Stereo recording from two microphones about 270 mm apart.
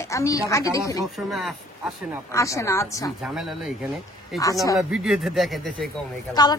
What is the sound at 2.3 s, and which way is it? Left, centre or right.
Speech, centre.